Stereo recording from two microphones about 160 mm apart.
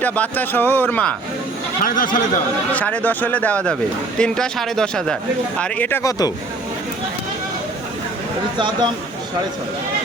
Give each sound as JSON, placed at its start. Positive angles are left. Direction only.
{"t": 0.0, "sound": "speech", "side_deg": 10}
{"t": 1.8, "sound": "speech", "side_deg": 60}
{"t": 2.7, "sound": "speech", "side_deg": 10}
{"t": 8.5, "sound": "speech", "side_deg": -30}